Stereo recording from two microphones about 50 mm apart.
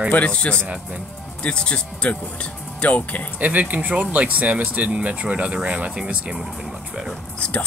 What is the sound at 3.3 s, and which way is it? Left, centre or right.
Speech, right.